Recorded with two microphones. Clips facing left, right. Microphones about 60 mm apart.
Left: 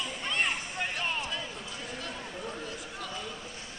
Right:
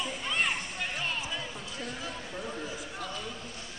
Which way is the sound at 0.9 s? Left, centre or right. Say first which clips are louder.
Left 1 dB; centre.